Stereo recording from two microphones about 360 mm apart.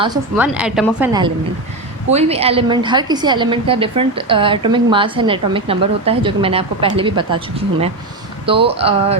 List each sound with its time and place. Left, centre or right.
0.0 s a woman's voice: centre
8.4 s a woman's voice: centre